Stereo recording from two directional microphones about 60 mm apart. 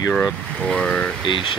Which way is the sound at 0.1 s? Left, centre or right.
Centre.